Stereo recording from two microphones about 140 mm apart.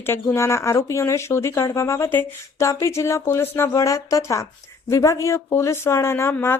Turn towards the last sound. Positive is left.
turn(degrees=15)  # may be behind; listen again after turning